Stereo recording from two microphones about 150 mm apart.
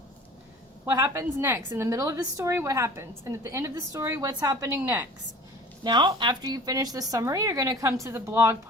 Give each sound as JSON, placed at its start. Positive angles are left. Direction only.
{"t": 0.9, "sound": "a woman's voice", "side_deg": -20}
{"t": 5.8, "sound": "a woman's voice", "side_deg": -30}